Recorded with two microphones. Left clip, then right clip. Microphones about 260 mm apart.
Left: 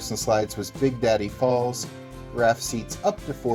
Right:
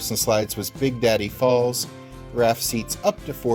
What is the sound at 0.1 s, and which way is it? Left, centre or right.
Speech, right.